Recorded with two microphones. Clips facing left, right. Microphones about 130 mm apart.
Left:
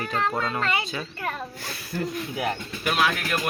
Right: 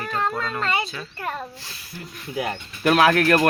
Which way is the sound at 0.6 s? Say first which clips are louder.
Right 2 dB; 30° right (ahead or behind).